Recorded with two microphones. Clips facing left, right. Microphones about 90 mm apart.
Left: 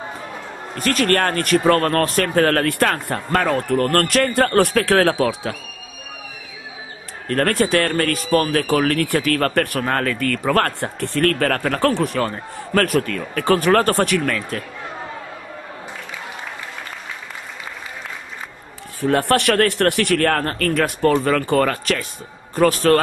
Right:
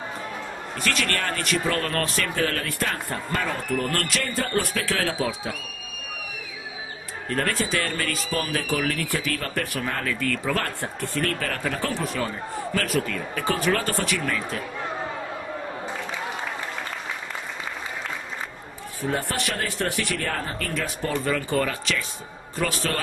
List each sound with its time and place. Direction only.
0.7 s speech: 45° left (ahead or behind); by 5.6 s 65° left (ahead or behind)
7.2 s speech: 60° left (ahead or behind)
18.9 s a man's voice: 65° left (ahead or behind); by 22.9 s 45° left (ahead or behind)